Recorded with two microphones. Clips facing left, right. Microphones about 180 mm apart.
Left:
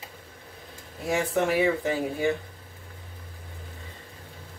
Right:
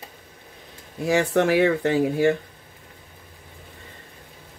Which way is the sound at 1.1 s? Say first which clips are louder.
Right 5 dB; 80° right.